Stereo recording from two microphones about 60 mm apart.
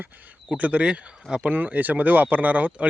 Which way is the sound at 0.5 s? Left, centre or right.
Right.